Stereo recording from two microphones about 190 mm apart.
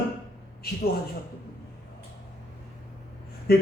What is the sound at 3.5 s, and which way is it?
Speech, 55° left (ahead or behind).